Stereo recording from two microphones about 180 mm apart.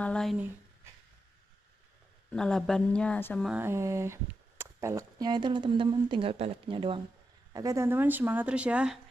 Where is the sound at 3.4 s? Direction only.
10° right (ahead or behind); by 7.0 s 30° right (ahead or behind).